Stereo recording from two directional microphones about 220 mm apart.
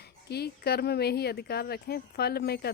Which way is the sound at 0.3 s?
45° left (ahead or behind).